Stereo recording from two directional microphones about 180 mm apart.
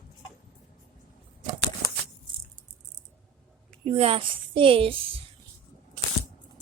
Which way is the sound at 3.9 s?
35° right (ahead or behind).